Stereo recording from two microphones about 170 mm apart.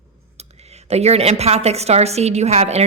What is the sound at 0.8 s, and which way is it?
A woman's voice, 40° right (ahead or behind).